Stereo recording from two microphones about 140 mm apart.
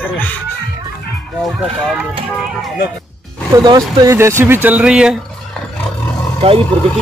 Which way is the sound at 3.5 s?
25° right (ahead or behind).